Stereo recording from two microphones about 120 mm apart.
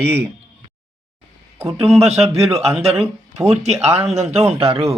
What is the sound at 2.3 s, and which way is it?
Speech, 60° right (ahead or behind).